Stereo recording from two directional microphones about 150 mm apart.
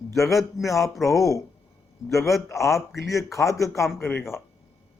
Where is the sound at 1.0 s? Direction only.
20° left (ahead or behind).